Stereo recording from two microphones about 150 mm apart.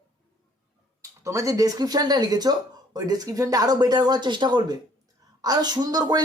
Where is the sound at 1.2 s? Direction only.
20° right (ahead or behind).